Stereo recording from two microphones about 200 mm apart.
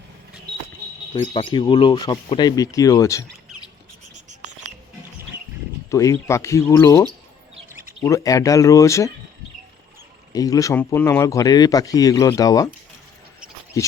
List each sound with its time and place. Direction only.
1.3 s speech: 25° left (ahead or behind)
5.9 s a man's voice: 15° left (ahead or behind)
8.0 s a man's voice: 15° left (ahead or behind)
10.3 s a man's voice: 15° left (ahead or behind)
13.7 s speech: 15° left (ahead or behind)